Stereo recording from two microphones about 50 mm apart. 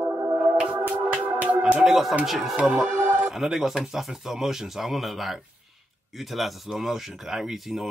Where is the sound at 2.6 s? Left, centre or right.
Centre.